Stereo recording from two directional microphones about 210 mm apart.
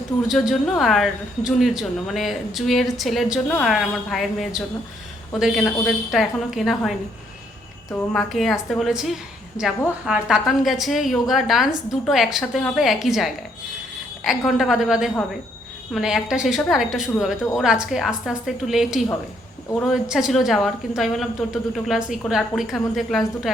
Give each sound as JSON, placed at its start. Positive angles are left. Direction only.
{"t": 0.3, "sound": "speech", "side_deg": 0}
{"t": 8.1, "sound": "speech", "side_deg": 0}
{"t": 9.6, "sound": "a woman's voice", "side_deg": 15}
{"t": 10.1, "sound": "speech", "side_deg": -5}